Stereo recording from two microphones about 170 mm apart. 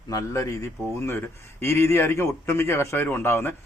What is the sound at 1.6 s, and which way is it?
A man's voice, 15° left (ahead or behind).